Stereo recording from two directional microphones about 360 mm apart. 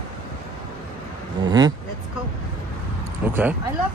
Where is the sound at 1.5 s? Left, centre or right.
Centre.